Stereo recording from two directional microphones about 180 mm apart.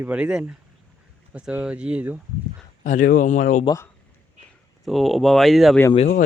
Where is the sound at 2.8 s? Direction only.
45° left (ahead or behind).